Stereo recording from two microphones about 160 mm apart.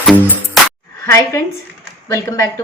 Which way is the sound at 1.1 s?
15° left (ahead or behind).